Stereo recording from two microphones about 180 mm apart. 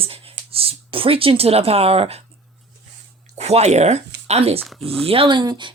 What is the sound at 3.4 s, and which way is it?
Speech, 35° right (ahead or behind).